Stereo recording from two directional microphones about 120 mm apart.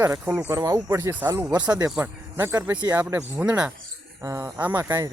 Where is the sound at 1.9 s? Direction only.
20° right (ahead or behind).